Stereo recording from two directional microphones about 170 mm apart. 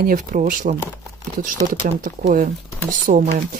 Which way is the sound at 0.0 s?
55° right (ahead or behind).